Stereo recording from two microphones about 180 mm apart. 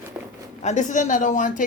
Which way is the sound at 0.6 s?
40° left (ahead or behind).